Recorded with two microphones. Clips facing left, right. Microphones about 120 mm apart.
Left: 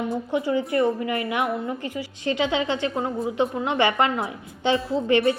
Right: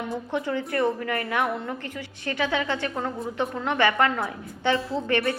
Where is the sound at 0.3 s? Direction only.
10° left (ahead or behind).